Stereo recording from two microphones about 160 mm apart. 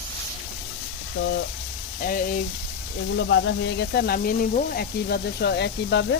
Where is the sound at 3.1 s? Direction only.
90° left.